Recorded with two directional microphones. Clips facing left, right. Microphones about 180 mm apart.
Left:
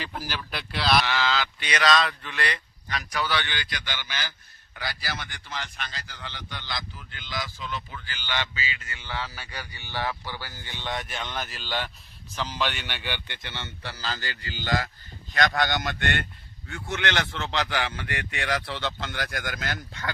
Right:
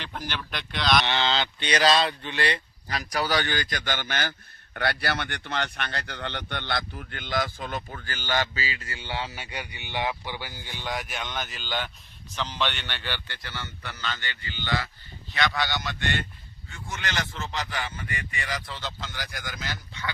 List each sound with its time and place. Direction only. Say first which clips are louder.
0.0 s speech: left 1 dB; 5° left (ahead or behind)
1.0 s a man's voice: even; 25° right (ahead or behind); by 20.1 s 50° left (ahead or behind)